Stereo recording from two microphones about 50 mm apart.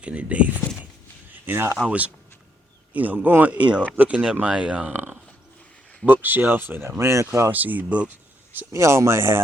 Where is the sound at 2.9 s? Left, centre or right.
Right.